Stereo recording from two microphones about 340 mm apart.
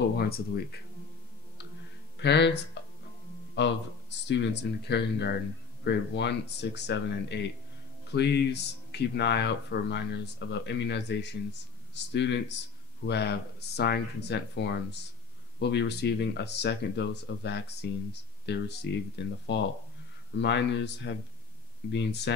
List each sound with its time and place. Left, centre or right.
0.2 s speech: left
2.2 s speech: left